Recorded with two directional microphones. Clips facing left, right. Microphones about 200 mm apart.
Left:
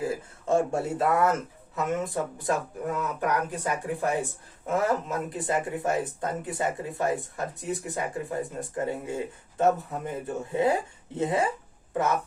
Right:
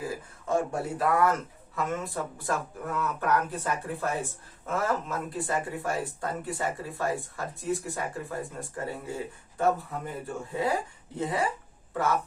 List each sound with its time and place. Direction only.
0.0 s speech: 25° left (ahead or behind)